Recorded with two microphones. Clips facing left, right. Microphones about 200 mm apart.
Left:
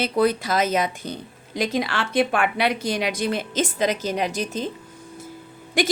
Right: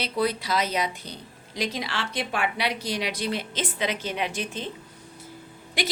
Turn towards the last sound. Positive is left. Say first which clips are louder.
# left 8 dB
turn(degrees=50)  # may be behind; listen again after turning